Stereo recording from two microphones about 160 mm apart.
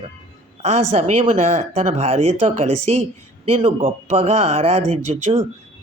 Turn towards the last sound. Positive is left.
turn(degrees=-40)  # may be behind; listen again after turning